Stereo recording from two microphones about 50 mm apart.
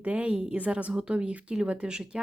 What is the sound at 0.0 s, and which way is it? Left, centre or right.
Speech, right.